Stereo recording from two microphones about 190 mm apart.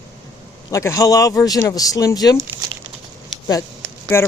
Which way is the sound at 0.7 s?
15° left (ahead or behind).